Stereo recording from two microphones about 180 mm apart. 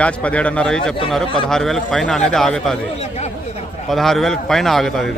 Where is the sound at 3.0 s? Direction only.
35° left (ahead or behind).